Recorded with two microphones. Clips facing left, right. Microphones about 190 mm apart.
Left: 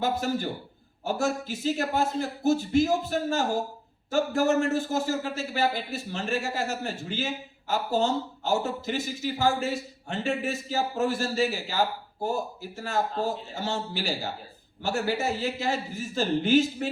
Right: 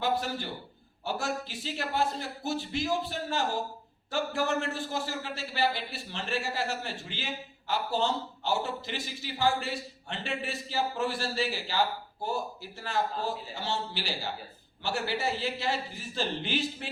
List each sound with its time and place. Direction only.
0.0 s a man's voice: 45° left (ahead or behind)